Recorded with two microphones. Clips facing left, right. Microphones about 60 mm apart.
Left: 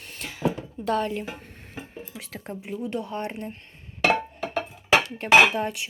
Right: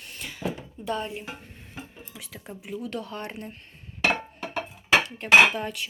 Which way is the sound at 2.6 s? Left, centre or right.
Left.